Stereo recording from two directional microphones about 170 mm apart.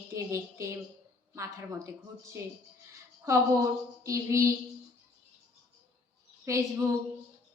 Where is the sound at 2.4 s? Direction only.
15° right (ahead or behind).